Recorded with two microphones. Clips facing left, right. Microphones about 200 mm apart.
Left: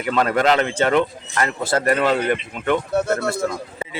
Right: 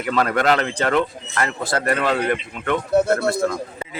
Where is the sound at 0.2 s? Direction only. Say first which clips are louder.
Left 1 dB; 25° left (ahead or behind).